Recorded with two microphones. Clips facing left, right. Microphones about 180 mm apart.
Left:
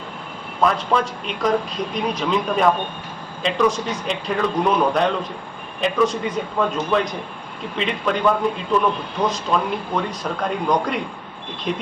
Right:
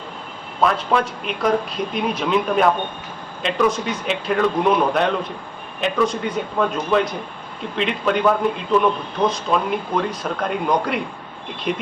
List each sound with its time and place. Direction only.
0.6 s a man's voice: centre (ahead or behind)